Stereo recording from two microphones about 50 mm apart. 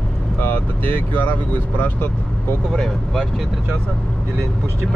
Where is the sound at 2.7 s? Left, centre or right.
Centre.